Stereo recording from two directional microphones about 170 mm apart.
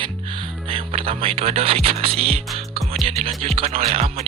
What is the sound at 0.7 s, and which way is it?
Speech, 35° right (ahead or behind).